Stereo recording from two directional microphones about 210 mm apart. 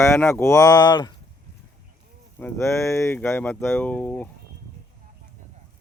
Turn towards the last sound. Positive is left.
turn(degrees=5)  # may be behind; listen again after turning